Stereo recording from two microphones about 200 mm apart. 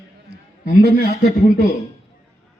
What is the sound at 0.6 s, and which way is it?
A man's voice, 50° left (ahead or behind).